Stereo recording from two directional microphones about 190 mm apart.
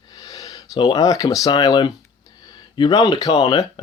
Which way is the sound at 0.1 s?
20° left (ahead or behind).